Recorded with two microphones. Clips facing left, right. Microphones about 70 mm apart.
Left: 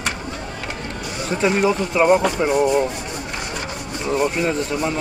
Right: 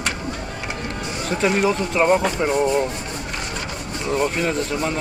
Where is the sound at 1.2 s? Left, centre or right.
Centre.